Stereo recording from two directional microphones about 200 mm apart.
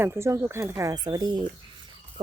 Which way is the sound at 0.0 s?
15° right (ahead or behind).